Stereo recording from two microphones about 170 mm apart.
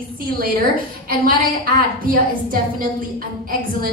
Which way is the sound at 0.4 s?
55° right (ahead or behind).